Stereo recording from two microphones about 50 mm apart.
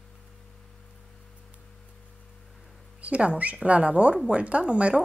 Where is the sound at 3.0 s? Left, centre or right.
Right.